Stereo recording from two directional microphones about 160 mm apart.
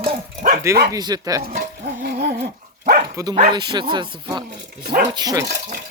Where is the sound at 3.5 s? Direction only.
30° right (ahead or behind).